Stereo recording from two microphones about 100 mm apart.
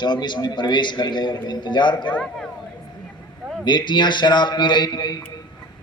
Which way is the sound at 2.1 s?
10° left (ahead or behind).